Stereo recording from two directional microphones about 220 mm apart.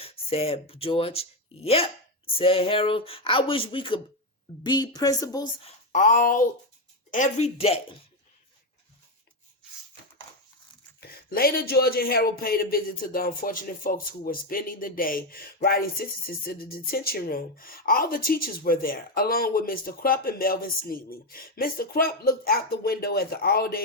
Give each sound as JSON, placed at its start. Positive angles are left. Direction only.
{"t": 0.0, "sound": "speech", "side_deg": 25}
{"t": 5.6, "sound": "speech", "side_deg": 35}
{"t": 11.0, "sound": "speech", "side_deg": 45}